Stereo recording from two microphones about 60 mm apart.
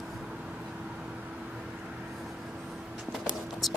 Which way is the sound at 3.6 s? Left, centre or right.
Centre.